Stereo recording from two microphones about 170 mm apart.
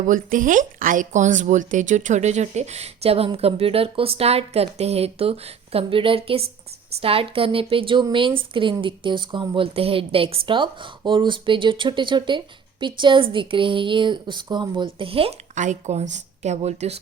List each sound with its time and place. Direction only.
0.0 s a woman's voice: 50° right (ahead or behind)